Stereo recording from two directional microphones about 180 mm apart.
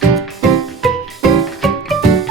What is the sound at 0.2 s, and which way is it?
Music, centre (ahead or behind).